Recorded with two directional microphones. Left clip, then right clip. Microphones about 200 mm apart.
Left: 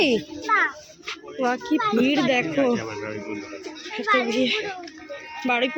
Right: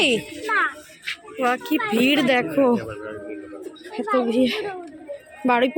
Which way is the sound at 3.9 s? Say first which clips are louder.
Even; 20° right (ahead or behind).